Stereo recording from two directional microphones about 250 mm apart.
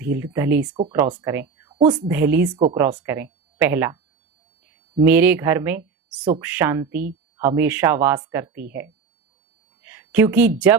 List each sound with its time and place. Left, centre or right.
0.0 s speech: centre
0.7 s speech: right
0.9 s speech: centre
1.7 s a woman's voice: right
2.0 s speech: centre
5.0 s speech: centre
9.8 s a sound: centre